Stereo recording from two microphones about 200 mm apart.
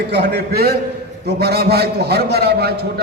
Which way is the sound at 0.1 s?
55° right (ahead or behind).